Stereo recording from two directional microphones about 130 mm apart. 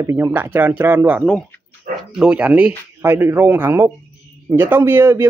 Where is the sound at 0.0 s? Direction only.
20° right (ahead or behind).